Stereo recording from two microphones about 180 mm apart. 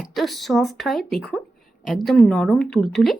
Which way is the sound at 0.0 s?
Centre (ahead or behind).